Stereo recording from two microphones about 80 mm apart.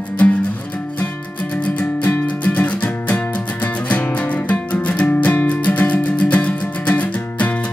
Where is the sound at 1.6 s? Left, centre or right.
Centre.